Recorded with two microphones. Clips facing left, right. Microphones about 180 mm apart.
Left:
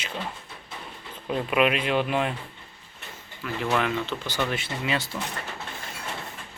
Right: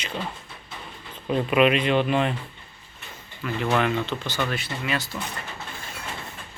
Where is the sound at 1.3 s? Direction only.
Centre (ahead or behind).